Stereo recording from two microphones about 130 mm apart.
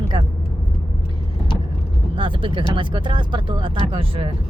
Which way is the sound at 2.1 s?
40° right (ahead or behind).